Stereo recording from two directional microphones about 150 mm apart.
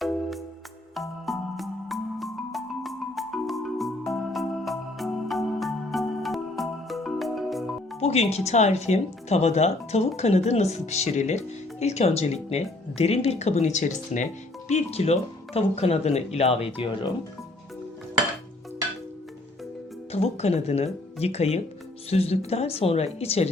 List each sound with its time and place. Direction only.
0.0 s music: centre (ahead or behind)
7.9 s speech: 45° left (ahead or behind)
14.7 s speech: 45° left (ahead or behind)
20.1 s speech: 45° left (ahead or behind)